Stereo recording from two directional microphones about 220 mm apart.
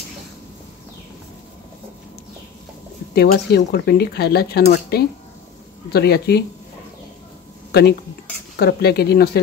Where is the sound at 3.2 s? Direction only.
50° left (ahead or behind).